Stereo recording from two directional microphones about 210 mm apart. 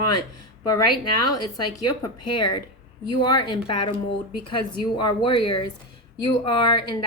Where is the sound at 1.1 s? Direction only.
20° left (ahead or behind).